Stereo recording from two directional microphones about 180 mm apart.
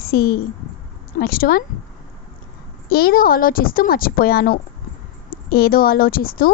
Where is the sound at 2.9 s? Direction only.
55° left (ahead or behind).